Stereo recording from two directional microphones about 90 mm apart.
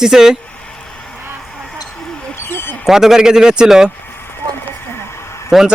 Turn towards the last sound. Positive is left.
turn(degrees=0)  # may be behind; listen again after turning